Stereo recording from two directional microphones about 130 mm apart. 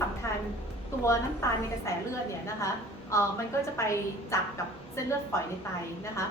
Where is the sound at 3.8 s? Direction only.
25° left (ahead or behind).